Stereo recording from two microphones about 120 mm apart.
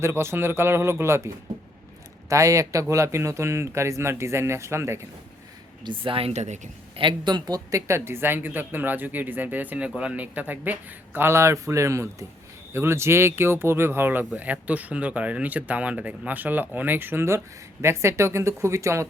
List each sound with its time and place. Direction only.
0.0 s speech: 20° right (ahead or behind)
2.3 s speech: 25° right (ahead or behind)
5.8 s speech: 45° right (ahead or behind); by 6.6 s 70° right (ahead or behind)
6.9 s speech: 40° right (ahead or behind); by 19.0 s 25° right (ahead or behind)